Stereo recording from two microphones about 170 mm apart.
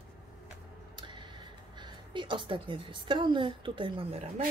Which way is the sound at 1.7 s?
25° right (ahead or behind).